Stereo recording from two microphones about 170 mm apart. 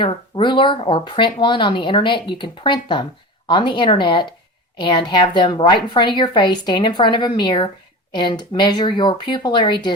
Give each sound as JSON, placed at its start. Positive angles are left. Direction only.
{"t": 0.0, "sound": "speech", "side_deg": 30}